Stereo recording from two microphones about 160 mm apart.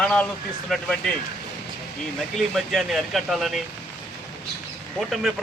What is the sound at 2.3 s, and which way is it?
Speech, centre (ahead or behind).